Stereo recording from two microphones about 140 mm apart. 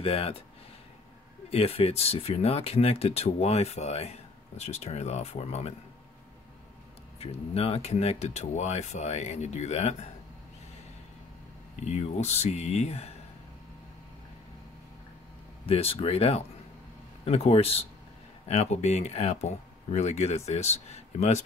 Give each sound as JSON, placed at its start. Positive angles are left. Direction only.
{"t": 0.0, "sound": "speech", "side_deg": 45}
{"t": 1.5, "sound": "speech", "side_deg": 45}
{"t": 7.2, "sound": "speech", "side_deg": 45}
{"t": 11.8, "sound": "speech", "side_deg": 50}
{"t": 15.6, "sound": "speech", "side_deg": 45}